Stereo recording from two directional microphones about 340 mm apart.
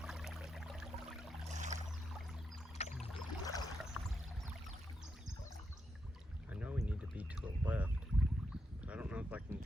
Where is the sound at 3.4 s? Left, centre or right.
Centre.